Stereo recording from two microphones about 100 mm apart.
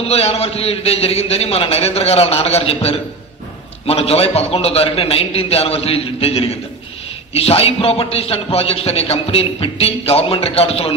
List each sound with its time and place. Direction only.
0.1 s a man's voice: 90° left